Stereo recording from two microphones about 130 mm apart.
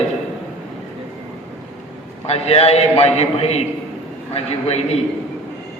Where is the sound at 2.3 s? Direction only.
50° left (ahead or behind).